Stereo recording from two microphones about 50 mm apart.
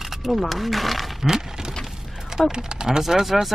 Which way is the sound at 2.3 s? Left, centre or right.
Centre.